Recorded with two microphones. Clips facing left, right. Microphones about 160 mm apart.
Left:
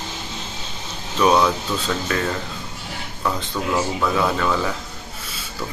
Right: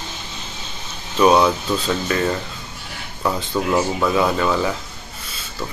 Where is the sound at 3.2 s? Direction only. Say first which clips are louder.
Right 3 dB; 10° right (ahead or behind).